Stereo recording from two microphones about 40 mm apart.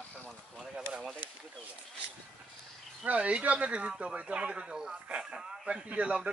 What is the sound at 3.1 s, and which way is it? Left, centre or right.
Speech, right.